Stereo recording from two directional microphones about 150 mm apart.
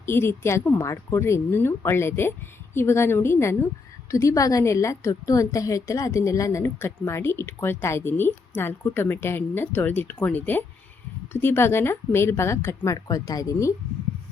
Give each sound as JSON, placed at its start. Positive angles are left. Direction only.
{"t": 0.0, "sound": "a woman's voice", "side_deg": 15}